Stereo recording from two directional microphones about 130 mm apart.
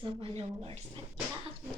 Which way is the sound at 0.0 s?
45° right (ahead or behind).